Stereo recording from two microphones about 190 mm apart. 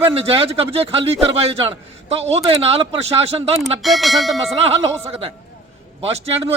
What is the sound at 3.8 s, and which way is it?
Speech, centre (ahead or behind).